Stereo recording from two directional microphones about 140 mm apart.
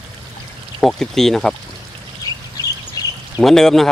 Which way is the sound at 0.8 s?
5° left (ahead or behind).